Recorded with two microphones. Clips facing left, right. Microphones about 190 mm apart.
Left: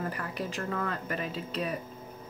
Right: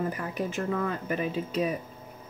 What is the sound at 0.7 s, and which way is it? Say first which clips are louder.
Speech: right 4 dB; 10° right (ahead or behind).